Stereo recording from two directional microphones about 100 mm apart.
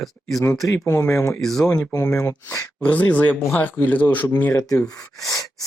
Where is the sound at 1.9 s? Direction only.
35° left (ahead or behind).